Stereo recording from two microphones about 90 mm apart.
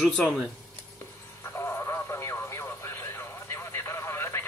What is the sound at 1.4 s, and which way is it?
Radio, 30° left (ahead or behind).